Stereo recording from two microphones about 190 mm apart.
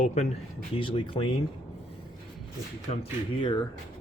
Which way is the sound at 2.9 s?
35° left (ahead or behind).